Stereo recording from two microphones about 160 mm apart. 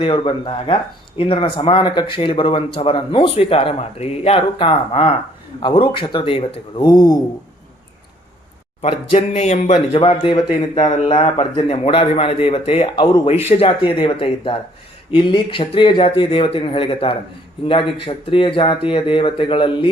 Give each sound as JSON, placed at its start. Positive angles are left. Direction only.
{"t": 0.0, "sound": "speech", "side_deg": 35}
{"t": 8.8, "sound": "speech", "side_deg": 40}